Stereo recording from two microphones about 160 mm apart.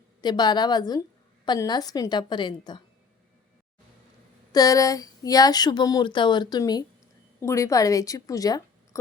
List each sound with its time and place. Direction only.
0.2 s speech: 25° left (ahead or behind)
4.5 s a woman's voice: 20° left (ahead or behind)